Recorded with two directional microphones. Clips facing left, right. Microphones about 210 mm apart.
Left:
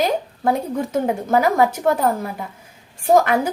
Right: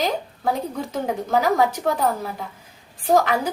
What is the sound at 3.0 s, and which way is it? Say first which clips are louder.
Speech: left 3 dB; 50° left (ahead or behind).